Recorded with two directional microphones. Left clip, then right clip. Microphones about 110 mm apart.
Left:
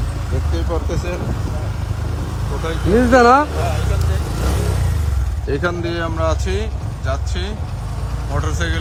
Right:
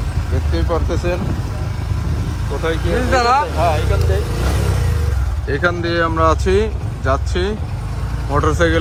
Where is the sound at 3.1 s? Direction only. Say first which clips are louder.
Left 4 dB; 90° left.